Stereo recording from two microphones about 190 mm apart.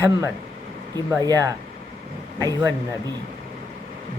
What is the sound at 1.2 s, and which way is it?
Speech, 15° right (ahead or behind).